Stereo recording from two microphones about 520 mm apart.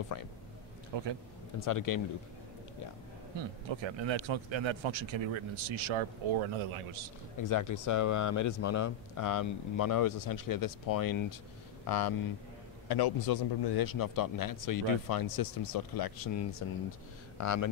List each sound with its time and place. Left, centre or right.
0.1 s a man's voice: left
0.9 s a man's voice: right
1.6 s a man's voice: left
3.3 s speech: right
7.3 s a man's voice: left
16.6 s a man's voice: left